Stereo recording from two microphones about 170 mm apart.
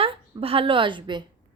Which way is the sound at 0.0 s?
35° right (ahead or behind).